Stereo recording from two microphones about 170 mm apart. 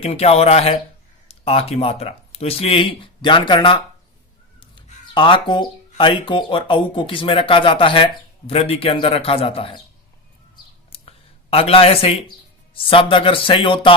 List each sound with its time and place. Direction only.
0.0 s speech: 35° left (ahead or behind)
11.5 s speech: 35° left (ahead or behind)